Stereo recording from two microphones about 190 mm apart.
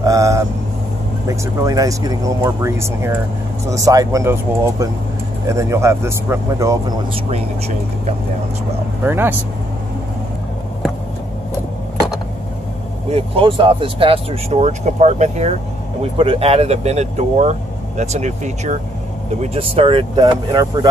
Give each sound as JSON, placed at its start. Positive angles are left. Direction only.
{"t": 0.0, "sound": "vehicle", "side_deg": -15}
{"t": 1.2, "sound": "speech", "side_deg": -15}
{"t": 7.2, "sound": "speech", "side_deg": -30}
{"t": 9.0, "sound": "speech", "side_deg": -10}
{"t": 13.1, "sound": "speech", "side_deg": -30}